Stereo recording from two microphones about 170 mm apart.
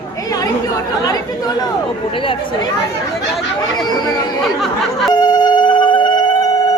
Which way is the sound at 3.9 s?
25° left (ahead or behind).